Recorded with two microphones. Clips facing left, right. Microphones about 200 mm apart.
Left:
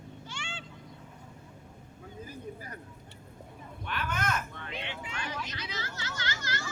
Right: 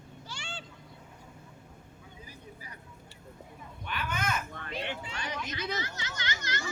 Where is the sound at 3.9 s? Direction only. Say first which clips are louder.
Left 1 dB; centre (ahead or behind).